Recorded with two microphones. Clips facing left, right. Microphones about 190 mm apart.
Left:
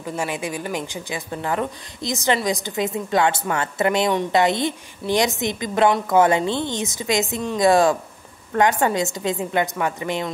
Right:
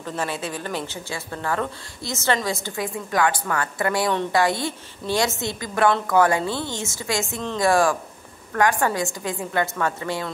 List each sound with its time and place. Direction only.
0.0 s a woman's voice: 10° left (ahead or behind)